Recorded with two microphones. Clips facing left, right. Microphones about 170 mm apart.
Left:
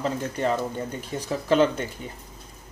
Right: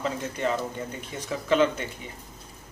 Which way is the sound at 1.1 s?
35° left (ahead or behind).